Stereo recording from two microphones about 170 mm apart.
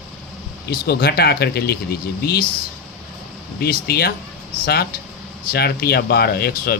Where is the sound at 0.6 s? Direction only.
70° left (ahead or behind).